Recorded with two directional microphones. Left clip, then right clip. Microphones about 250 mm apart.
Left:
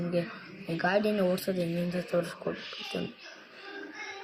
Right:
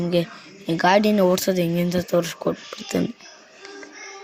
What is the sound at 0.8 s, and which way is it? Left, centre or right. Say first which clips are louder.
Speech: right 10 dB; right.